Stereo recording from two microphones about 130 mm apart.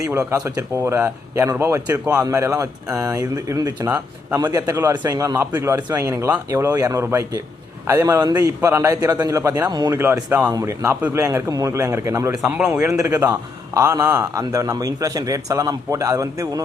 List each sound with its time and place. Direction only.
0.1 s a man's voice: 20° right (ahead or behind)
4.6 s speech: 15° right (ahead or behind)
4.9 s a man's voice: 25° right (ahead or behind)
9.9 s a man's voice: 20° right (ahead or behind)
12.3 s speech: 5° right (ahead or behind)
12.9 s a man's voice: 25° right (ahead or behind)